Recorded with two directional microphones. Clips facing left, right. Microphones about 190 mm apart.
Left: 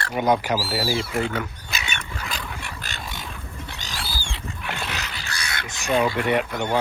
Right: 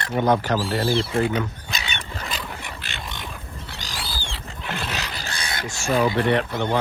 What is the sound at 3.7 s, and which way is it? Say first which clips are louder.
Wild animals: even; 20° left (ahead or behind).